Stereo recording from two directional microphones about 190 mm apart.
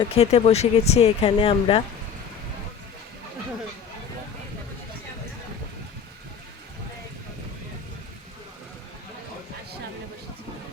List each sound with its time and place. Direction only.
0.0 s speech: 30° left (ahead or behind)